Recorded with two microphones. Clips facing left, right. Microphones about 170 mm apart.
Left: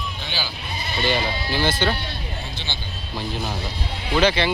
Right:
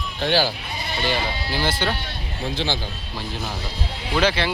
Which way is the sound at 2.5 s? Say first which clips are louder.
Right 9 dB; 90° right.